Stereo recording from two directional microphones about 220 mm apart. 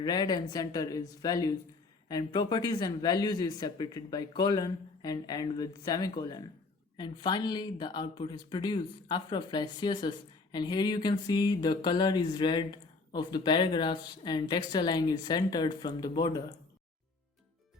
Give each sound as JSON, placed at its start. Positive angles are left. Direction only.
{"t": 0.0, "sound": "a woman's voice", "side_deg": 20}